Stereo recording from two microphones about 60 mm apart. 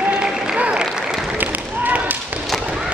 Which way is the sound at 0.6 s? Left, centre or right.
Centre.